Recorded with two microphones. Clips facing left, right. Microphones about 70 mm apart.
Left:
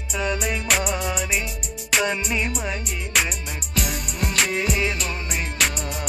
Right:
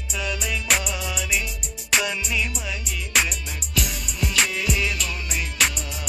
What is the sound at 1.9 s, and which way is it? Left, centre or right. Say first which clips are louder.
Music: left 2 dB; centre.